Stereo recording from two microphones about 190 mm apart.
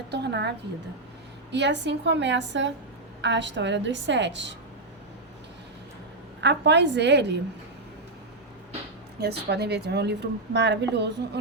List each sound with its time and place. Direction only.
0.1 s a woman's voice: 60° right (ahead or behind)
6.4 s a woman's voice: 65° right (ahead or behind)
9.2 s a woman's voice: 60° right (ahead or behind)